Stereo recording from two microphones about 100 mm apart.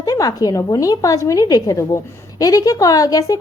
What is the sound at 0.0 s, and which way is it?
Speech, 35° left (ahead or behind).